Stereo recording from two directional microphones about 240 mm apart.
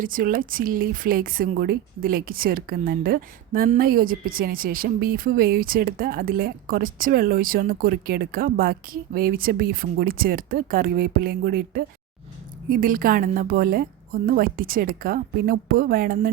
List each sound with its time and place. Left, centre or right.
0.0 s speech: right